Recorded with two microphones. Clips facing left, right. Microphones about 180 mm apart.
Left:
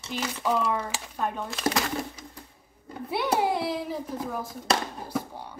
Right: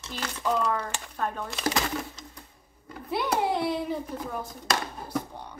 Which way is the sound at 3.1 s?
5° left (ahead or behind).